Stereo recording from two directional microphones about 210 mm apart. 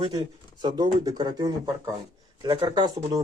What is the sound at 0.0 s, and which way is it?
Speech, 20° right (ahead or behind).